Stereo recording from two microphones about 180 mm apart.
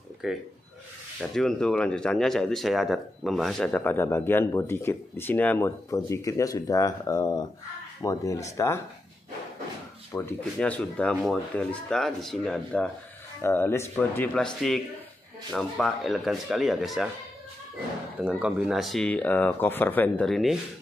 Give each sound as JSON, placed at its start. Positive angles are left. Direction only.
{"t": 0.2, "sound": "speech", "side_deg": 0}
{"t": 10.1, "sound": "speech", "side_deg": 10}
{"t": 18.2, "sound": "speech", "side_deg": -5}